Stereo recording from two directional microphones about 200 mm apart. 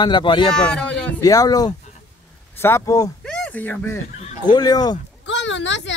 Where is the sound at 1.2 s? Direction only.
20° left (ahead or behind).